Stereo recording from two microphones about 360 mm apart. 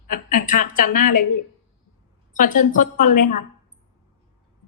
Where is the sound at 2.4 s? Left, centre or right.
Left.